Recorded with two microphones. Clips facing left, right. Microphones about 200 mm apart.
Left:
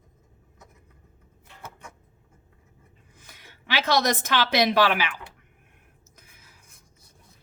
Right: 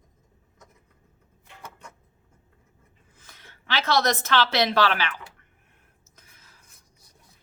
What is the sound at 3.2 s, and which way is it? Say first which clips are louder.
Speech: left 1 dB; 15° left (ahead or behind).